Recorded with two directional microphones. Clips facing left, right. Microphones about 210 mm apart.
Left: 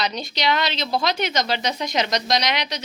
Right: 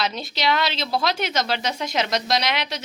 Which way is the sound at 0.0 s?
5° right (ahead or behind).